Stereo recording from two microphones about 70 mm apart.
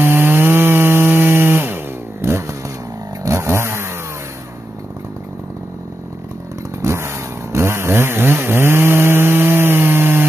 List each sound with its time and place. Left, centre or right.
0.0 s wood: right
2.2 s motorcycle: right
3.3 s chainsaw: right
6.8 s chainsaw: right